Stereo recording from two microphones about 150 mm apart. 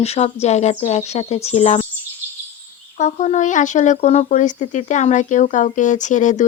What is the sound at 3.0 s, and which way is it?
Speech, 55° left (ahead or behind).